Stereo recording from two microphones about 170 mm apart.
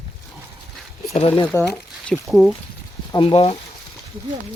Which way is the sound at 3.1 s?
30° left (ahead or behind).